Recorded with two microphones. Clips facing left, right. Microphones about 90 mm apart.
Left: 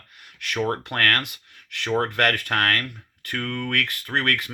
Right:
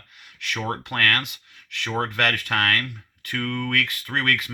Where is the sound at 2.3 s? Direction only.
40° left (ahead or behind).